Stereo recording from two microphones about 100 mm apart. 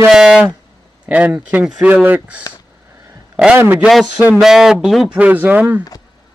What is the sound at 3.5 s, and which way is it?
Speech, 20° right (ahead or behind).